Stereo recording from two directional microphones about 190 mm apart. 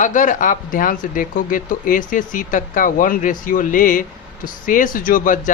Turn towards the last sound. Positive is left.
turn(degrees=45)  # may be behind; listen again after turning